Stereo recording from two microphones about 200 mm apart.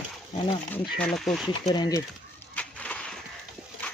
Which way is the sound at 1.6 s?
20° left (ahead or behind).